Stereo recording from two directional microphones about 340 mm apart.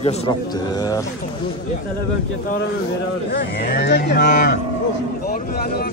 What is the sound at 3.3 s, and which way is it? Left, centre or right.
Speech, left.